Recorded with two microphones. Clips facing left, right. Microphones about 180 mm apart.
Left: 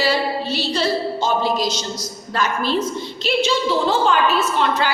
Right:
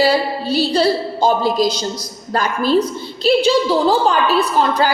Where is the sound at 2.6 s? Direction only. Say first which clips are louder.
Right 5 dB; 40° right (ahead or behind).